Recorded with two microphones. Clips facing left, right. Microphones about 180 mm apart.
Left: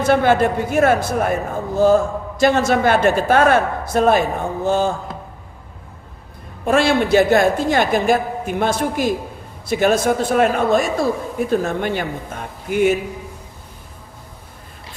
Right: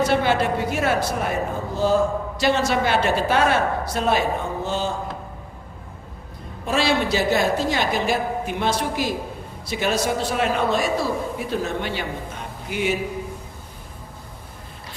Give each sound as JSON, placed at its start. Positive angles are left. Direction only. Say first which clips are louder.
{"t": 0.0, "sound": "a woman's voice", "louder": "left 5 dB", "side_deg": 50}
{"t": 6.7, "sound": "a woman's voice", "louder": "left 6 dB", "side_deg": 55}